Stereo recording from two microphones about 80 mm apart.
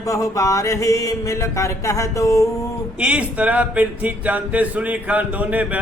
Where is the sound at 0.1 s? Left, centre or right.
Left.